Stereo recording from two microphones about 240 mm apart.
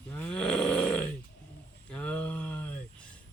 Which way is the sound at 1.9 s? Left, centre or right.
Centre.